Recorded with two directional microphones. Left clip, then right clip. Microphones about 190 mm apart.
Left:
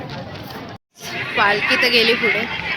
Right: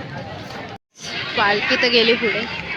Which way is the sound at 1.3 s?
20° right (ahead or behind).